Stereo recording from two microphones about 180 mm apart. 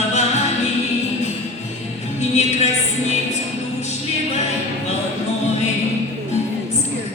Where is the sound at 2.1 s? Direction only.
40° left (ahead or behind).